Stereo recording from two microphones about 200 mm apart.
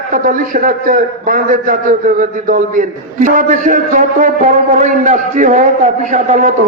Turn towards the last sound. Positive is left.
turn(degrees=-40)  # may be behind; listen again after turning